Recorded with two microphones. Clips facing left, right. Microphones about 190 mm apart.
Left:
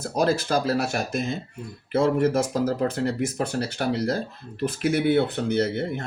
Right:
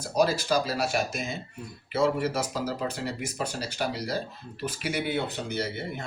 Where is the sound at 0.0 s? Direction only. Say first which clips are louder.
Left 2 dB; 55° left (ahead or behind).